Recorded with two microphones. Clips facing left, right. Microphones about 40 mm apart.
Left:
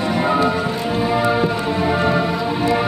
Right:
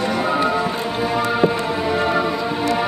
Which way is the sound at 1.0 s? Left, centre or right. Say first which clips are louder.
Even; centre.